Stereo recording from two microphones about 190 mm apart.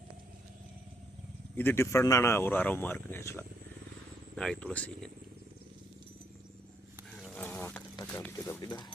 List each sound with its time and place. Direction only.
1.5 s speech: 10° left (ahead or behind)
7.2 s insect: 5° left (ahead or behind)
8.0 s speech: 10° left (ahead or behind)
8.6 s speech: 20° left (ahead or behind)